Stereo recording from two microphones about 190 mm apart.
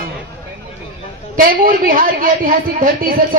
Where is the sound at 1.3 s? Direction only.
50° right (ahead or behind).